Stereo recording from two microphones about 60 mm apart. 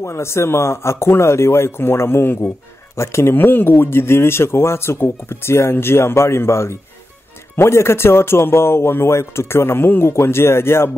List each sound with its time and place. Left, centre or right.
0.0 s speech: left
3.0 s speech: left